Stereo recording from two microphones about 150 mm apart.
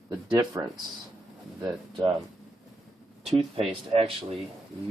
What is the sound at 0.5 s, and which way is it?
Speech, 15° right (ahead or behind).